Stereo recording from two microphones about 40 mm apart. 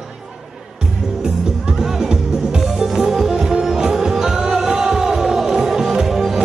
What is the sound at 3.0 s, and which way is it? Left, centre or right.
Music, centre.